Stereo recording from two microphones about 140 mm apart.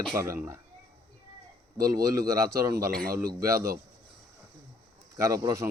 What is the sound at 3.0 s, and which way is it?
Speech, 90° right.